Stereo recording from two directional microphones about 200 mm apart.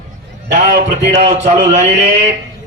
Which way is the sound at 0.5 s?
35° right (ahead or behind).